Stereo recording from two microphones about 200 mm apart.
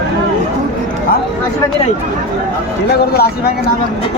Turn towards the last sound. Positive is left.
turn(degrees=50)  # may be behind; listen again after turning